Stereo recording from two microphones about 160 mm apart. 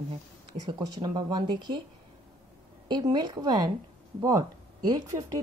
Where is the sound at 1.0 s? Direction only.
25° right (ahead or behind).